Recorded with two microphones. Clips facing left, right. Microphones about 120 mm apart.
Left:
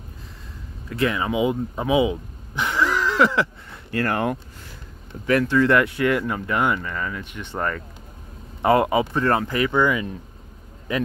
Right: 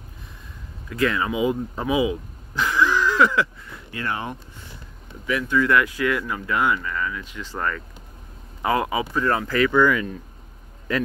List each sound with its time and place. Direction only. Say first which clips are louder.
0.9 s speech: even; 25° left (ahead or behind)
3.9 s speech: left 6 dB; 55° left (ahead or behind)
5.5 s speech: right 2 dB; 35° left (ahead or behind)
9.5 s speech: right 2 dB; 20° left (ahead or behind)